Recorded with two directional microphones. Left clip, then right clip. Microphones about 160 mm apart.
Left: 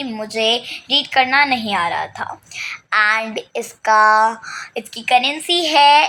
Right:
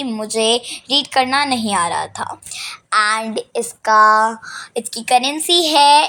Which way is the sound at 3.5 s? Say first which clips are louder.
Right 1 dB; 30° right (ahead or behind).